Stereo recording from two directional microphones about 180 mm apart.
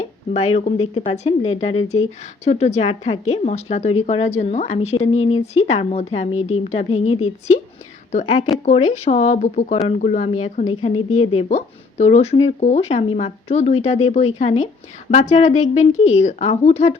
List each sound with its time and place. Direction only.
0.0 s speech: 35° left (ahead or behind)